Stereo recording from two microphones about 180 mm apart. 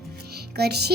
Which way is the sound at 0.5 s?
65° right (ahead or behind).